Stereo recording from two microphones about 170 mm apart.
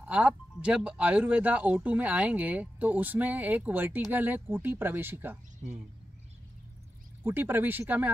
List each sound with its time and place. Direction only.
0.0 s speech: 5° right (ahead or behind)
5.6 s speech: 45° right (ahead or behind)
7.2 s speech: 10° right (ahead or behind)